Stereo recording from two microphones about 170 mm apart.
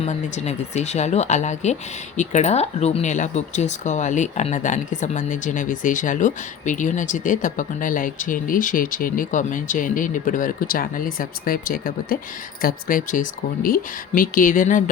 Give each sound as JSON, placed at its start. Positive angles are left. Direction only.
{"t": 0.0, "sound": "speech", "side_deg": 40}